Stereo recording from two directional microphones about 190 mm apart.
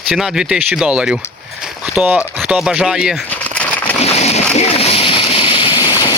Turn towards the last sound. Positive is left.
turn(degrees=20)  # may be behind; listen again after turning